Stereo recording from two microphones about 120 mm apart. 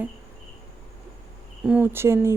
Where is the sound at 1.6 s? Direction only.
15° right (ahead or behind).